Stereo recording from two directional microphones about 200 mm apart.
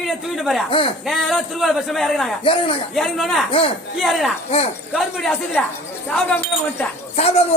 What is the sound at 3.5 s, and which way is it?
Speech, 30° left (ahead or behind).